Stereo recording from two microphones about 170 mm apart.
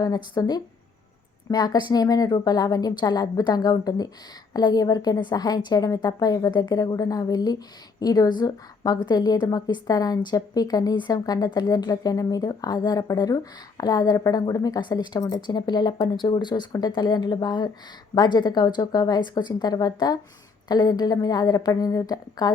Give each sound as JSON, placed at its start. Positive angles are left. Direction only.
{"t": 0.0, "sound": "a woman's voice", "side_deg": 25}